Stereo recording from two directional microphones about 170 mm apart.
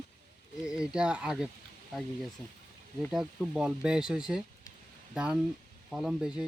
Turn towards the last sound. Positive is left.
turn(degrees=-5)  # may be behind; listen again after turning